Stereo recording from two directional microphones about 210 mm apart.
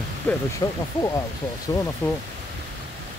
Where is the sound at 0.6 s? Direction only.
20° left (ahead or behind).